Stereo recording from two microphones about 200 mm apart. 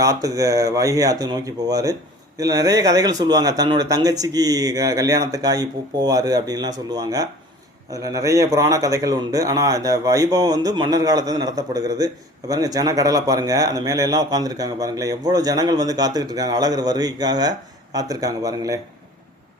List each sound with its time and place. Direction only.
0.0 s a man's voice: 15° right (ahead or behind)